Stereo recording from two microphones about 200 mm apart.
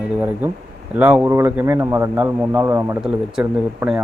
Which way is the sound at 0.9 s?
10° right (ahead or behind).